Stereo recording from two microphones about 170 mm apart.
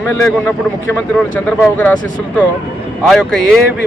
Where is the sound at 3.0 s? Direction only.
5° left (ahead or behind).